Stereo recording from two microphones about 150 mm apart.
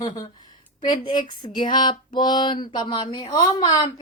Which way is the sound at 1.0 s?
30° left (ahead or behind).